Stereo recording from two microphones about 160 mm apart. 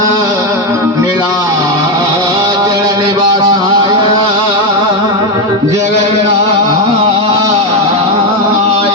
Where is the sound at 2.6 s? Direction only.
25° right (ahead or behind).